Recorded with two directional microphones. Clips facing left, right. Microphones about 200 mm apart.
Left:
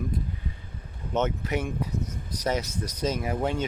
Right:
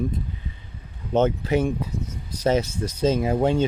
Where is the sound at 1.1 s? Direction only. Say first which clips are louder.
Right 7 dB; 30° right (ahead or behind).